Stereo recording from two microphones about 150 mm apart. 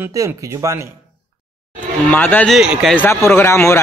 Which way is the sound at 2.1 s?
10° left (ahead or behind).